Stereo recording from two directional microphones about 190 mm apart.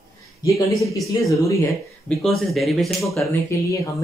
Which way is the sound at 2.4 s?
Centre (ahead or behind).